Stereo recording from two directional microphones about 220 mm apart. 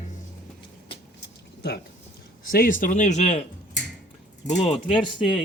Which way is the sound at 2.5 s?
40° left (ahead or behind).